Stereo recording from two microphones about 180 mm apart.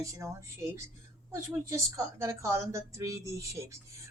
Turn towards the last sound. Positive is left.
turn(degrees=-20)  # may be behind; listen again after turning